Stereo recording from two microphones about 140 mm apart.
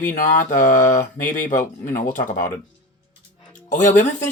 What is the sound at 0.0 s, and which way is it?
Speech, 75° left (ahead or behind).